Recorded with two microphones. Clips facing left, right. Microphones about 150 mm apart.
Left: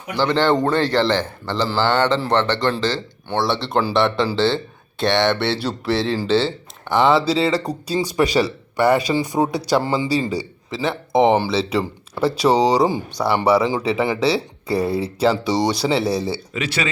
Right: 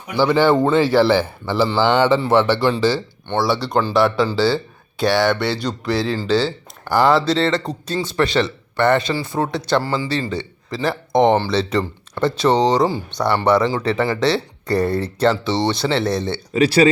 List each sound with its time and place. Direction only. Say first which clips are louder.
0.1 s a man's voice: right 3 dB; 10° right (ahead or behind); by 16.4 s 5° left (ahead or behind)
16.5 s speech: right 10 dB; 35° right (ahead or behind)